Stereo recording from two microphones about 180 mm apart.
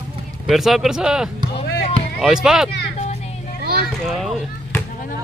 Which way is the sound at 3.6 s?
60° right (ahead or behind).